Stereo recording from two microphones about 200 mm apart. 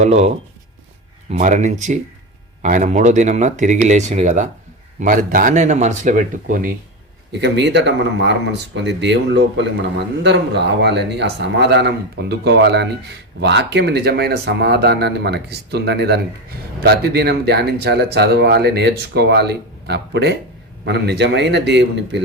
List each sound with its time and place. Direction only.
0.0 s speech: 35° right (ahead or behind)
1.3 s speech: 35° right (ahead or behind)
7.3 s speech: 60° right (ahead or behind)